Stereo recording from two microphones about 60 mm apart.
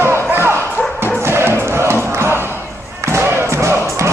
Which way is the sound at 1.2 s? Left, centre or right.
Right.